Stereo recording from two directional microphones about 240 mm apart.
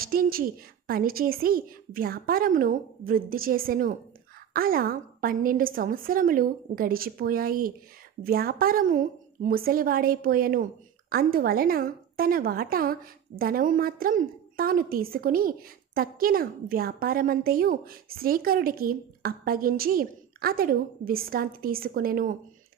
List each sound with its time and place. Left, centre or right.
0.0 s a woman's voice: right